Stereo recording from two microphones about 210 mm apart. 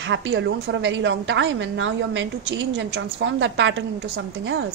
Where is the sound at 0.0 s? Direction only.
60° right (ahead or behind).